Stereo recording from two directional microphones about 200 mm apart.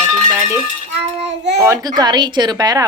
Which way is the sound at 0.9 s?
60° right (ahead or behind).